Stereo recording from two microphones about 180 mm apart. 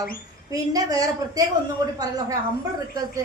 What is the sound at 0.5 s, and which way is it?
A woman's voice, 20° right (ahead or behind).